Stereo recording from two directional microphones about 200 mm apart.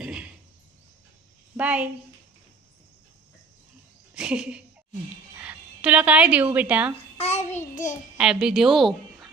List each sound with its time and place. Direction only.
0.0 s a sound: 5° right (ahead or behind)
1.5 s a woman's voice: 5° right (ahead or behind)
4.1 s a sound: 5° right (ahead or behind)
5.4 s speech: 5° right (ahead or behind)
7.2 s child singing: 35° left (ahead or behind)
8.2 s a woman's voice: 5° right (ahead or behind)